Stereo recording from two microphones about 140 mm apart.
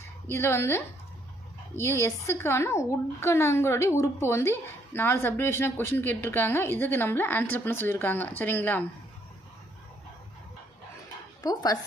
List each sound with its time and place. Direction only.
0.0 s a woman's voice: 20° left (ahead or behind)
11.4 s a woman's voice: 30° left (ahead or behind)